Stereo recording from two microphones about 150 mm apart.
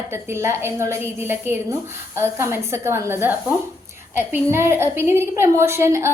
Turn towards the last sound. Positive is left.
turn(degrees=-15)  # may be behind; listen again after turning